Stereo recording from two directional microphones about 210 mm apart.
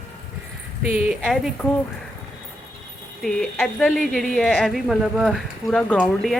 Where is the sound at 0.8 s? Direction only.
5° right (ahead or behind).